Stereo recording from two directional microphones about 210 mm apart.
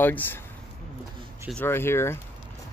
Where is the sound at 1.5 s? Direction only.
10° left (ahead or behind).